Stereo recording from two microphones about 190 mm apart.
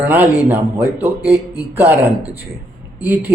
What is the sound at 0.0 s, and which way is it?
Speech, 10° right (ahead or behind).